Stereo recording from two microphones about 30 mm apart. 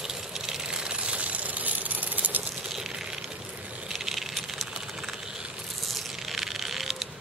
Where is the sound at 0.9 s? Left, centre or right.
Right.